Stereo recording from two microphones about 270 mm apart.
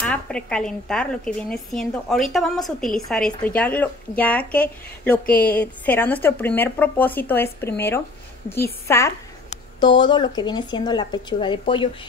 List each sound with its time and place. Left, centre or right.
0.0 s speech: centre
8.8 s speech: centre